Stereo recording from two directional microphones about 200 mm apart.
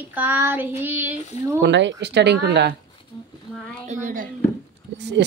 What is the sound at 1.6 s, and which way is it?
Speech, 60° right (ahead or behind).